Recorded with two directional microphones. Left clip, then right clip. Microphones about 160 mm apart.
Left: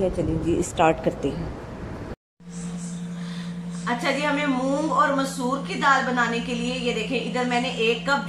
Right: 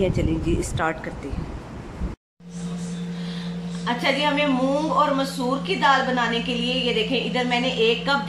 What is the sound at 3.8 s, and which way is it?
Speech, 15° right (ahead or behind).